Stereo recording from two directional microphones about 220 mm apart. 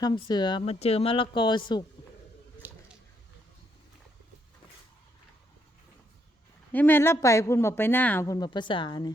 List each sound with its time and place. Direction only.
0.0 s speech: 20° left (ahead or behind)
2.6 s a sound: 10° right (ahead or behind)
6.7 s speech: 10° left (ahead or behind)